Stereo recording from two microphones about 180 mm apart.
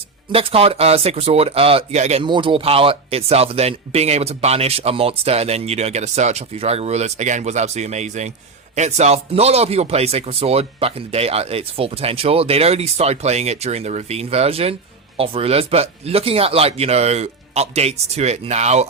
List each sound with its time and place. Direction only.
0.3 s speech: 30° right (ahead or behind)
2.2 s speech: 25° right (ahead or behind)